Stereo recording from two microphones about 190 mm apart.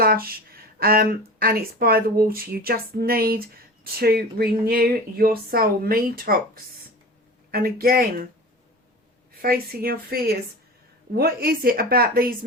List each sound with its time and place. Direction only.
0.0 s speech: 50° right (ahead or behind)
9.3 s speech: 50° right (ahead or behind)